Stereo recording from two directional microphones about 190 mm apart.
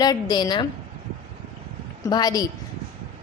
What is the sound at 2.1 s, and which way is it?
Speech, 20° left (ahead or behind).